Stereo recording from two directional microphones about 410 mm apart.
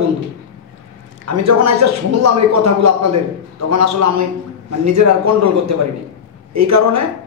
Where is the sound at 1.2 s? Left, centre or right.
Right.